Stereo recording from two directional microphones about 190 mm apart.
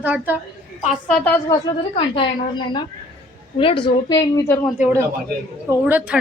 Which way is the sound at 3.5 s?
30° left (ahead or behind).